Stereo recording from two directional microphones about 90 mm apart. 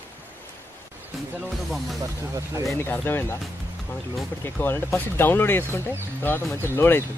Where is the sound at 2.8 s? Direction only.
25° left (ahead or behind).